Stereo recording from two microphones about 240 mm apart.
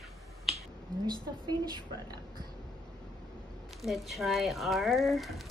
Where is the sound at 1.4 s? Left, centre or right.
Centre.